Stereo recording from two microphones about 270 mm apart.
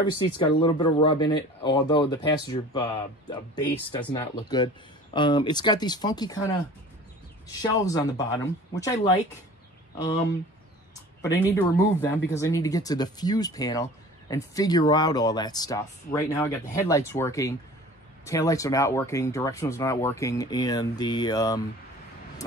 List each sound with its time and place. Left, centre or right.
0.0 s speech: centre
7.6 s speech: centre
11.5 s speech: centre